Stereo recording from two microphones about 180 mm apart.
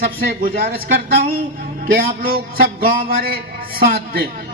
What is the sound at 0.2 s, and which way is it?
A man's voice, 55° right (ahead or behind).